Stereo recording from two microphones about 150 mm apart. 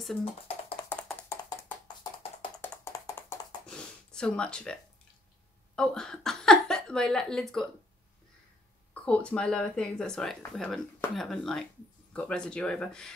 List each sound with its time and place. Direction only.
0.2 s music: 40° left (ahead or behind)
0.8 s music: 5° left (ahead or behind)
1.3 s music: 15° left (ahead or behind)
2.6 s tap: 10° left (ahead or behind)
2.9 s music: 15° left (ahead or behind)
3.6 s a sound: 5° left (ahead or behind)
5.8 s speech: 5° left (ahead or behind)
9.0 s speech: 5° left (ahead or behind)